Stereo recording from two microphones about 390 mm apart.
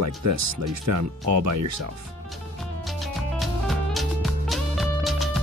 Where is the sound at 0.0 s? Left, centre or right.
Right.